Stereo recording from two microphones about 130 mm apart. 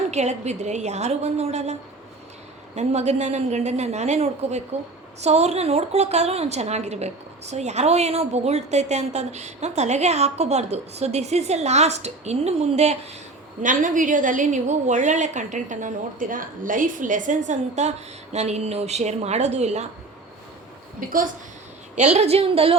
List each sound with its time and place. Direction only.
0.1 s a woman's voice: 60° right (ahead or behind)
2.7 s a woman's voice: 60° right (ahead or behind)
13.6 s a woman's voice: 85° right; by 19.9 s 60° right (ahead or behind)
21.9 s speech: 60° right (ahead or behind)